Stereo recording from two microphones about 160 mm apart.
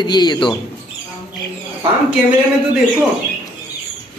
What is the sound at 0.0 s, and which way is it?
Speech, 25° left (ahead or behind).